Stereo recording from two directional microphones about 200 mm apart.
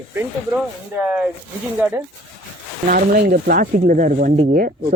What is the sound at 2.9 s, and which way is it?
Speech, 45° right (ahead or behind).